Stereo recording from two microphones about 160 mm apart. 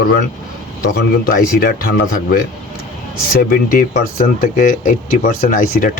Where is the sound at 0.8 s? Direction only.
65° left (ahead or behind).